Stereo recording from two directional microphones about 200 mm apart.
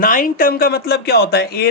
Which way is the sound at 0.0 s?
45° left (ahead or behind).